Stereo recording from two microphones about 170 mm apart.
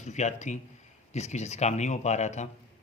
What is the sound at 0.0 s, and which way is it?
Speech, 45° left (ahead or behind).